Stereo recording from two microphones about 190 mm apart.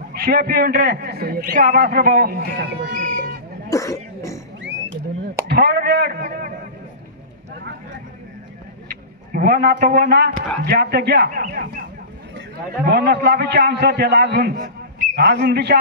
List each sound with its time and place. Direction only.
0.1 s a man's voice: 50° right (ahead or behind)
3.7 s speech: 15° left (ahead or behind)
5.5 s a sound: 70° right (ahead or behind)
9.3 s a man's voice: 50° right (ahead or behind)